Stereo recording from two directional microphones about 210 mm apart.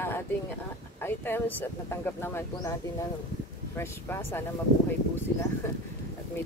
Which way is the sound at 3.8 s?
10° left (ahead or behind).